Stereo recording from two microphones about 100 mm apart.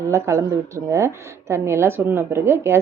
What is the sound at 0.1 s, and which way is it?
Speech, 30° right (ahead or behind).